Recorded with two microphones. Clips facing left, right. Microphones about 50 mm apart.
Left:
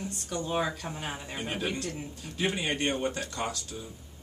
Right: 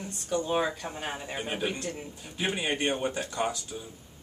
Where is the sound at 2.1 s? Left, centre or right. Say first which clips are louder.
Left 2 dB; centre.